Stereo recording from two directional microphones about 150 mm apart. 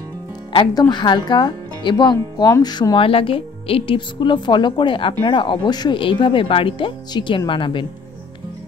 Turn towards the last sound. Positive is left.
turn(degrees=35)  # may be behind; listen again after turning